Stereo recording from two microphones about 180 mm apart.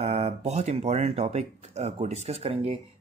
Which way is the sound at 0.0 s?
35° right (ahead or behind).